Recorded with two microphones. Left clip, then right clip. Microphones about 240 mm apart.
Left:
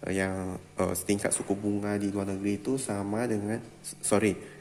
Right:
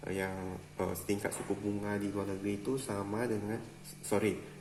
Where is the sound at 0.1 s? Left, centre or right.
Left.